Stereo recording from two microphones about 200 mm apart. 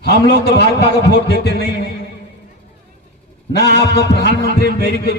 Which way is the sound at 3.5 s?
55° left (ahead or behind).